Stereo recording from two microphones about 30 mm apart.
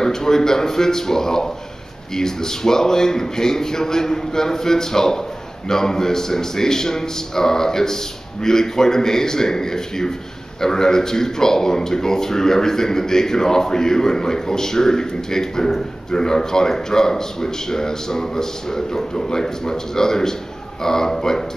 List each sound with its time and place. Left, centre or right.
0.0 s speech: centre